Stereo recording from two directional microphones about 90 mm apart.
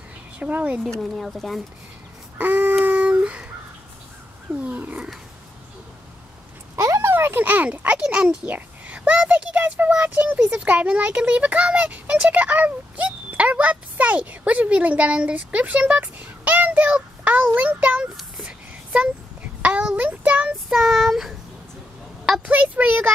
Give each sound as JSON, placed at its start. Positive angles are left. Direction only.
{"t": 0.4, "sound": "a child's voice", "side_deg": -20}
{"t": 0.8, "sound": "speech", "side_deg": 5}
{"t": 2.3, "sound": "a sound", "side_deg": -20}
{"t": 2.8, "sound": "dog", "side_deg": -20}
{"t": 4.6, "sound": "a child's voice", "side_deg": -20}
{"t": 6.8, "sound": "a child's voice", "side_deg": -30}
{"t": 18.4, "sound": "a sound", "side_deg": -15}
{"t": 19.6, "sound": "child singing", "side_deg": -10}
{"t": 20.7, "sound": "speech", "side_deg": -5}
{"t": 22.4, "sound": "a child's voice", "side_deg": -15}